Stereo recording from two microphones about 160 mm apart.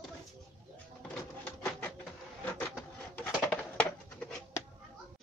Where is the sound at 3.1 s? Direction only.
10° left (ahead or behind).